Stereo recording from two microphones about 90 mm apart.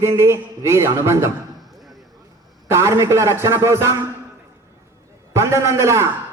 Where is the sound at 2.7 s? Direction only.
30° right (ahead or behind).